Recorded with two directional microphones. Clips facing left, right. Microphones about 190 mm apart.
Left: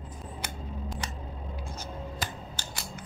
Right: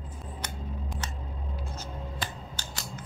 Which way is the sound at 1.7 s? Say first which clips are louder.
Left 1 dB; 10° left (ahead or behind).